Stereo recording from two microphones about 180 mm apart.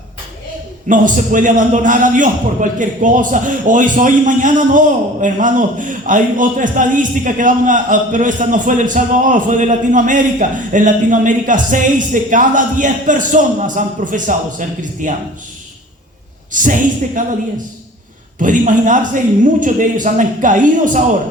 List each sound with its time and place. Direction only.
0.9 s a man's voice: 45° right (ahead or behind)
16.5 s a man's voice: 45° right (ahead or behind)
18.3 s a man's voice: 45° right (ahead or behind)